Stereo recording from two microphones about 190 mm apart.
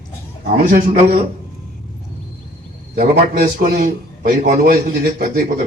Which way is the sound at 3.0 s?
45° right (ahead or behind).